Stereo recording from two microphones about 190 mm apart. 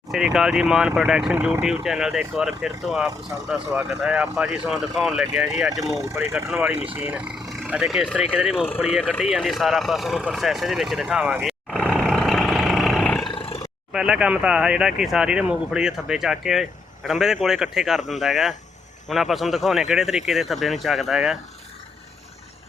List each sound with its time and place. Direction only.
0.1 s speech: centre (ahead or behind)
5.8 s speech: 15° right (ahead or behind)
9.3 s vehicle: centre (ahead or behind)
13.2 s roar: 25° left (ahead or behind)
13.9 s speech: 5° right (ahead or behind)